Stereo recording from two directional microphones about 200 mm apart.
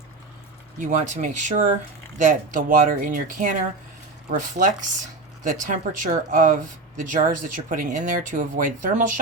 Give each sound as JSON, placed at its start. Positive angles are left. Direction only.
{"t": 0.8, "sound": "speech", "side_deg": -40}